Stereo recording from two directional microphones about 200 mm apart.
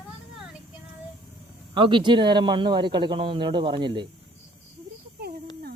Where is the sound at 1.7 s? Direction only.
25° right (ahead or behind).